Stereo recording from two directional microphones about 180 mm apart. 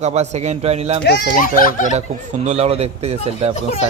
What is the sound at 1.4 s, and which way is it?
Speech, 50° left (ahead or behind).